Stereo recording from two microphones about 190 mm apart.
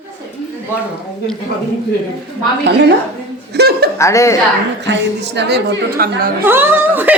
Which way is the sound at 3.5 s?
55° right (ahead or behind).